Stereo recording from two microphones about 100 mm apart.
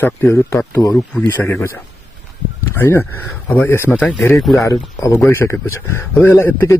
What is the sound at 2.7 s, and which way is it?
Speech, 25° left (ahead or behind).